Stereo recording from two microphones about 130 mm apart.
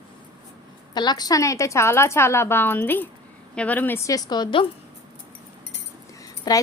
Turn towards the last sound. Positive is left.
turn(degrees=30)  # may be behind; listen again after turning